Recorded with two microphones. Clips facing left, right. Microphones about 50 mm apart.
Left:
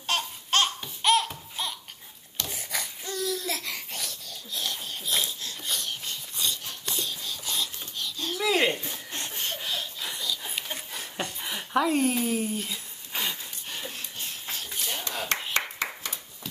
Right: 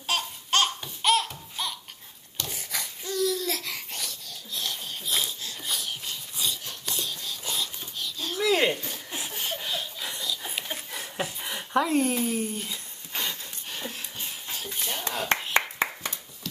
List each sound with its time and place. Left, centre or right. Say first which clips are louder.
0.0 s laughter: even; centre
2.4 s babbling: left 1 dB; centre
15.5 s clapping: right 4 dB; right